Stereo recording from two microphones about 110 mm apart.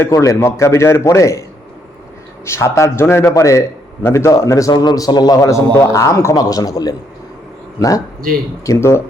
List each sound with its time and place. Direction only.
0.0 s a man's voice: 30° left (ahead or behind)